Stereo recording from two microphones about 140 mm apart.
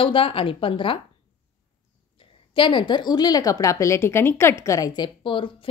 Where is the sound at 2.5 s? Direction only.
35° left (ahead or behind).